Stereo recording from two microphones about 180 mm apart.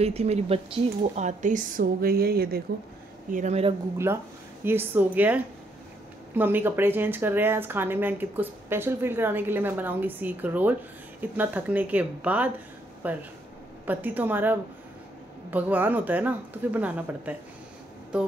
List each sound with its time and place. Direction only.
0.0 s speech: 35° right (ahead or behind); by 2.6 s 60° right (ahead or behind)
3.3 s speech: 45° right (ahead or behind)
4.6 s speech: 10° right (ahead or behind)